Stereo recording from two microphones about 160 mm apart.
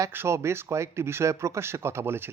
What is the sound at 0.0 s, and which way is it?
Speech, 15° right (ahead or behind).